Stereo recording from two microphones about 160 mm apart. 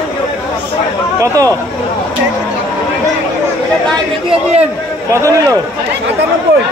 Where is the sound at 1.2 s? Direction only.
20° right (ahead or behind).